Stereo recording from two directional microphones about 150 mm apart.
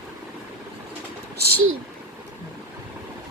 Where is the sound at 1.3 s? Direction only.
90° right.